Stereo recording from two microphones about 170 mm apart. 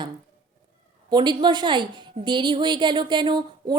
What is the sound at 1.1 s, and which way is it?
A woman's voice, 25° right (ahead or behind).